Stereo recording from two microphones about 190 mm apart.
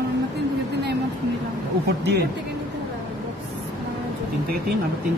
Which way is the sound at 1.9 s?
60° right (ahead or behind).